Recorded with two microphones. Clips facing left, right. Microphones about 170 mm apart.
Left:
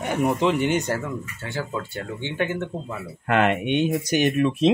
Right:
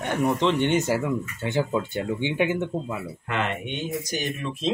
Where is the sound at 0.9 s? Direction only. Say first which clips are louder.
Right 3 dB; 15° right (ahead or behind).